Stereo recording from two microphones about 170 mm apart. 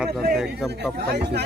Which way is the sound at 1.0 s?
70° right (ahead or behind).